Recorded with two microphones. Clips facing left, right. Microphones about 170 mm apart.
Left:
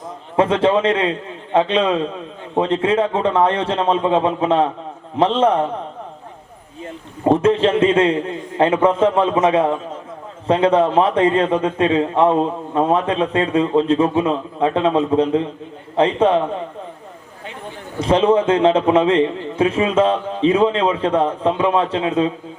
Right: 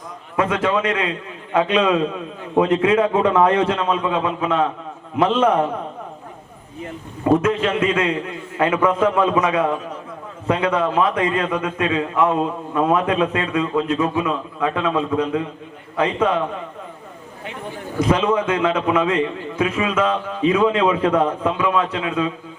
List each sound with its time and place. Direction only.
0.3 s a man's voice: 30° left (ahead or behind)
7.4 s a man's voice: 30° left (ahead or behind)
18.0 s a man's voice: 30° left (ahead or behind)